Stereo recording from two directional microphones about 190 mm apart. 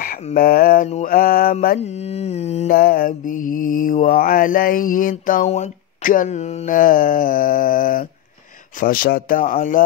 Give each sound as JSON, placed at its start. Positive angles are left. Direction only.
{"t": 0.0, "sound": "a sound", "side_deg": 45}
{"t": 1.0, "sound": "mantra", "side_deg": 50}
{"t": 1.8, "sound": "humming", "side_deg": 35}
{"t": 2.7, "sound": "mantra", "side_deg": 50}